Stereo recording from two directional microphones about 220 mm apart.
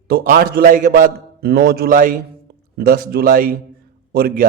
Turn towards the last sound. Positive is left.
turn(degrees=-45)  # may be behind; listen again after turning